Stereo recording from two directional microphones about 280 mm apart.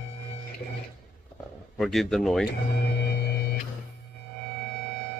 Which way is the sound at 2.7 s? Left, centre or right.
Left.